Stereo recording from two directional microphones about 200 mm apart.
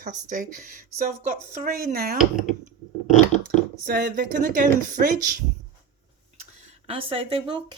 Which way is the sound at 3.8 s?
45° right (ahead or behind).